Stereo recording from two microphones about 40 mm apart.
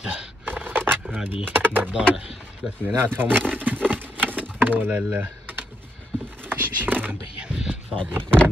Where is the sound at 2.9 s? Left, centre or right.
Right.